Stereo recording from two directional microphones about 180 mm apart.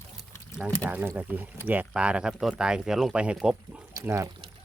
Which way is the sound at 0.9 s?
10° right (ahead or behind).